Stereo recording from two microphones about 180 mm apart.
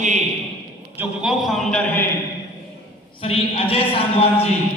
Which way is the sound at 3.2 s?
30° left (ahead or behind).